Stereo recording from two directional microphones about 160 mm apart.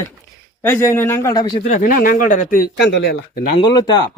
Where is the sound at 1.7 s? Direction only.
60° left (ahead or behind); by 3.4 s 90° left.